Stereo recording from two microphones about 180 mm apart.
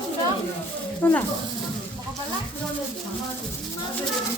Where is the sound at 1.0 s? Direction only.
10° left (ahead or behind).